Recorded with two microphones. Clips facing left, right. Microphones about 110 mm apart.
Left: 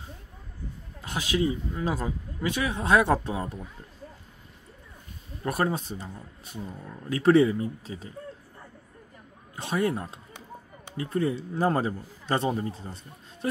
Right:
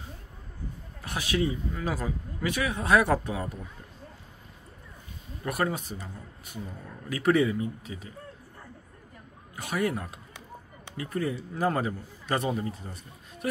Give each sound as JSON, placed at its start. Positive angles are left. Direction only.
{"t": 1.0, "sound": "speech", "side_deg": 20}
{"t": 5.4, "sound": "speech", "side_deg": 30}
{"t": 9.6, "sound": "speech", "side_deg": 30}